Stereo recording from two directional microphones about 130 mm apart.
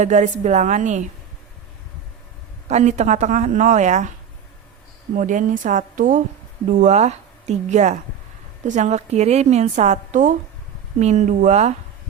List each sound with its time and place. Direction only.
0.0 s a woman's voice: 65° right (ahead or behind)
2.6 s a woman's voice: 65° right (ahead or behind)
5.1 s speech: 80° right
6.7 s a woman's voice: 65° right (ahead or behind)